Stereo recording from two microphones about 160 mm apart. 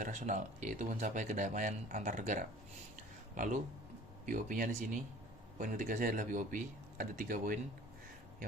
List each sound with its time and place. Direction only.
0.0 s speech: 50° right (ahead or behind)
2.9 s a sound: 55° right (ahead or behind)
4.3 s speech: 55° right (ahead or behind)